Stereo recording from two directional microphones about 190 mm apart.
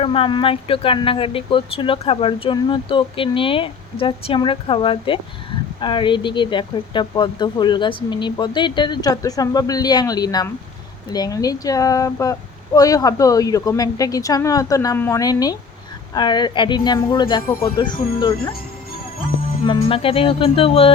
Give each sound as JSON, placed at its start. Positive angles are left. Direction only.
{"t": 0.0, "sound": "speech", "side_deg": 30}
{"t": 19.6, "sound": "speech", "side_deg": 25}